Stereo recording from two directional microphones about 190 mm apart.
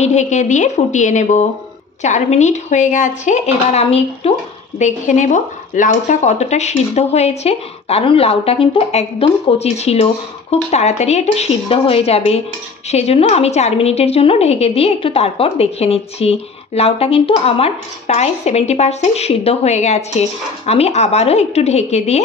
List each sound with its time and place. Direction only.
0.0 s a woman's voice: 35° left (ahead or behind)